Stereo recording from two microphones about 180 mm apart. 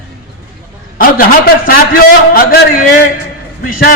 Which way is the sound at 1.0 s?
50° left (ahead or behind).